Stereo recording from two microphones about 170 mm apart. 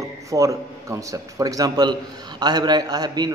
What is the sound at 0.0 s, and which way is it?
Speech, 20° right (ahead or behind).